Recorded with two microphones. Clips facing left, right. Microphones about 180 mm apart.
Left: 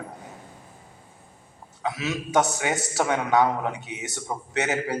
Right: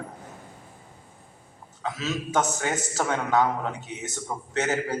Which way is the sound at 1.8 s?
15° left (ahead or behind).